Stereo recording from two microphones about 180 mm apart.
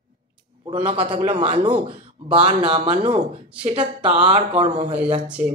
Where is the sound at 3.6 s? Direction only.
30° right (ahead or behind).